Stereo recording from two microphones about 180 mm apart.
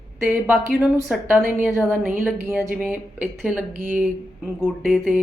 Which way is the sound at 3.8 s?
50° right (ahead or behind).